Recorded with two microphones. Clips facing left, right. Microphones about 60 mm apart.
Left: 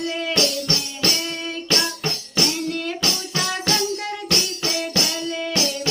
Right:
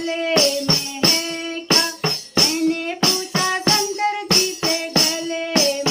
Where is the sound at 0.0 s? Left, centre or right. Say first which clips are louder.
Right 4 dB; right.